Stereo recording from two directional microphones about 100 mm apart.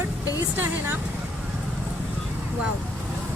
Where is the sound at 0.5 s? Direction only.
20° right (ahead or behind).